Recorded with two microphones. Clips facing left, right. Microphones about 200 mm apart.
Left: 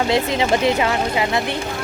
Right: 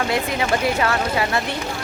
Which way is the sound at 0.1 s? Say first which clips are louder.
Left 3 dB; 25° left (ahead or behind).